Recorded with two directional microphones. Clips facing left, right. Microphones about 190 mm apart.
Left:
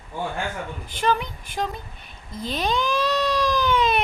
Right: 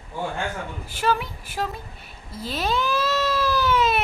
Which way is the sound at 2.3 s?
5° right (ahead or behind).